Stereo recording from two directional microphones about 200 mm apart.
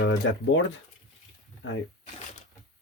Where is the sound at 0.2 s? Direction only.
65° left (ahead or behind).